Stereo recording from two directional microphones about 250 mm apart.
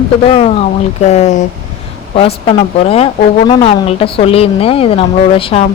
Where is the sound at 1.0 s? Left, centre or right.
Left.